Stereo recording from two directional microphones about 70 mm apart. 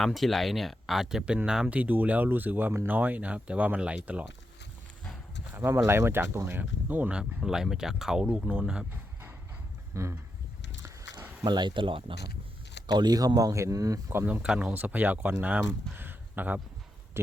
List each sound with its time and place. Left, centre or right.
0.0 s speech: centre
1.8 s speech: right
5.5 s speech: right
6.6 s speech: right
7.2 s speech: centre
8.4 s speech: right
8.6 s speech: centre
9.9 s speech: right
11.4 s speech: right
12.9 s speech: right
14.4 s speech: centre
14.7 s speech: right